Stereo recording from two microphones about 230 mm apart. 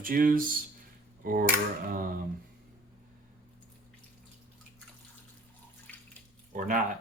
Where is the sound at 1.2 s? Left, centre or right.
Right.